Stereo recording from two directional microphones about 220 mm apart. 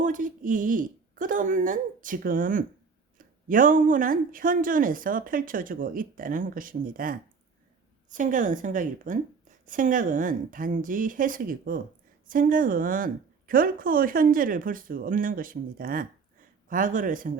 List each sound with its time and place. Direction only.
0.0 s speech: 35° right (ahead or behind)